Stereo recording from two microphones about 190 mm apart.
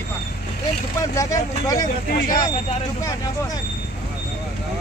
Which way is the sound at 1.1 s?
15° left (ahead or behind).